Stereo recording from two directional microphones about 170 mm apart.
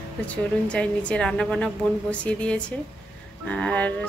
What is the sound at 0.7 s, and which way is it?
A woman's voice, 5° left (ahead or behind).